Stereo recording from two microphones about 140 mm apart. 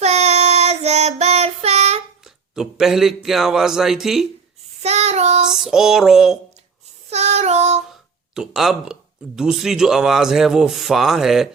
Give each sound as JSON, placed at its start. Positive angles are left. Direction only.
{"t": 0.0, "sound": "child singing", "side_deg": -50}
{"t": 2.2, "sound": "speech", "side_deg": -5}
{"t": 4.8, "sound": "child singing", "side_deg": -50}
{"t": 5.5, "sound": "a sound", "side_deg": -5}
{"t": 7.1, "sound": "child singing", "side_deg": -50}
{"t": 8.4, "sound": "speech", "side_deg": -5}